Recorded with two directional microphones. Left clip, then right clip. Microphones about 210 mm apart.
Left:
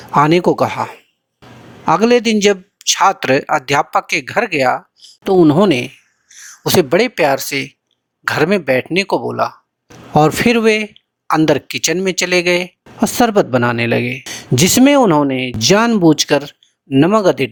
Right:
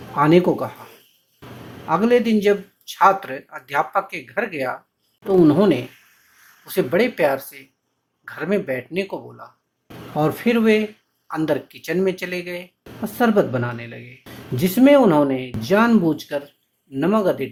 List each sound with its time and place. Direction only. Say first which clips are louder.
0.2 s speech: left 5 dB; 45° left (ahead or behind)
1.9 s speech: left 6 dB; 45° left (ahead or behind)